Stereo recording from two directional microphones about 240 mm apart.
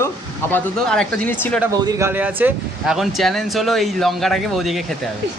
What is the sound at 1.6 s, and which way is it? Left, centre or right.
Speech, centre.